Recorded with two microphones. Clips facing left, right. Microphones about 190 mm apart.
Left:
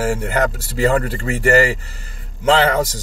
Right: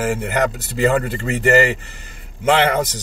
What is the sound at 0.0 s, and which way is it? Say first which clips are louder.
Speech: left 1 dB; 20° right (ahead or behind).